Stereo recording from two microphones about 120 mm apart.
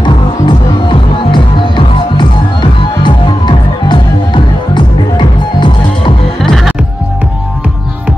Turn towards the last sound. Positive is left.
turn(degrees=0)  # may be behind; listen again after turning